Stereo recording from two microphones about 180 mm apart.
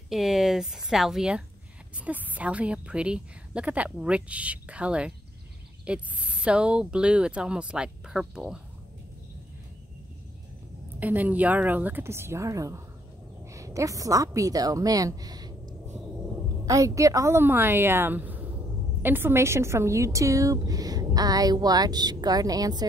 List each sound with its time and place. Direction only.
0.1 s a woman's voice: centre (ahead or behind)
11.0 s a woman's voice: 10° right (ahead or behind)